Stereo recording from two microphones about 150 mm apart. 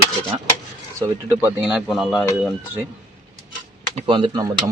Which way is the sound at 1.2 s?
15° right (ahead or behind).